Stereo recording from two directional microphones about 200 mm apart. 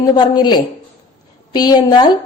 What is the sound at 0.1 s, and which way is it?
A woman's voice, 20° left (ahead or behind).